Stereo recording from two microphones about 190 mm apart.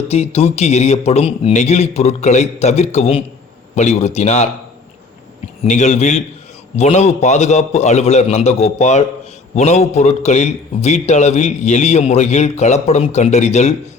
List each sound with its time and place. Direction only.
0.1 s a man's voice: 35° left (ahead or behind)
5.6 s a man's voice: 40° left (ahead or behind)